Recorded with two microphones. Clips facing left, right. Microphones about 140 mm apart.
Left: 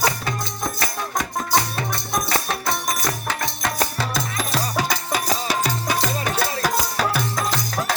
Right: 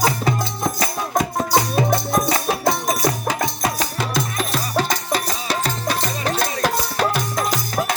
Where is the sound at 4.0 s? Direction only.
Centre (ahead or behind).